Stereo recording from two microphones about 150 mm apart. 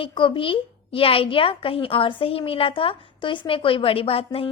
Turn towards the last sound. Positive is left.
turn(degrees=40)  # may be behind; listen again after turning